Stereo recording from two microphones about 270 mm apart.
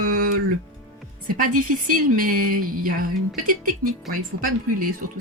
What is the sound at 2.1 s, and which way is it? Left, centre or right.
Speech, right.